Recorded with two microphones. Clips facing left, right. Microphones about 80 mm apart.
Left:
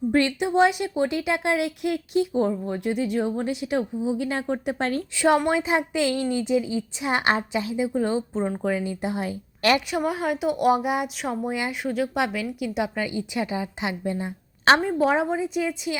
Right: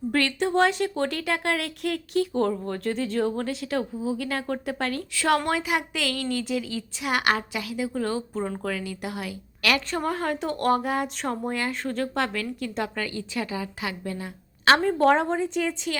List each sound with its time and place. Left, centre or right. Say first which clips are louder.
0.1 s a woman's voice: left 1 dB; centre
9.9 s speech: left 2 dB; centre
14.8 s speech: right 1 dB; centre